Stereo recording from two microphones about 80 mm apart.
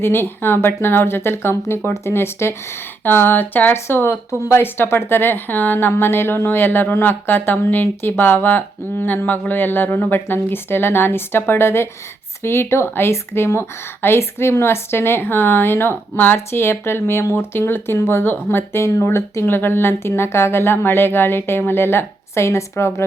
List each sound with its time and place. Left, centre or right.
0.0 s speech: left